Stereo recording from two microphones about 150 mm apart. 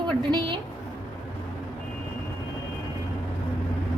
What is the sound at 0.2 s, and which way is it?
Speech, 30° right (ahead or behind).